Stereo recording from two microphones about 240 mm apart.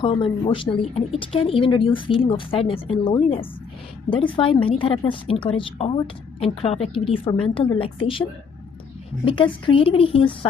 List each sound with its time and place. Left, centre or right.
0.0 s speech: left
9.2 s speech: left